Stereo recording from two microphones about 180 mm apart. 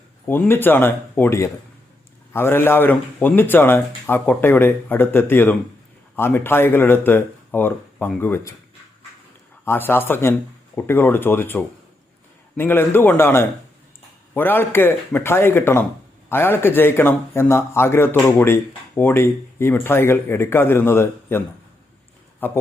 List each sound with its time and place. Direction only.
0.3 s speech: 10° left (ahead or behind)
9.6 s speech: 10° left (ahead or behind)